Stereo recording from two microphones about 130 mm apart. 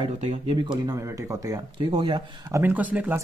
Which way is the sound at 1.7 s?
40° right (ahead or behind).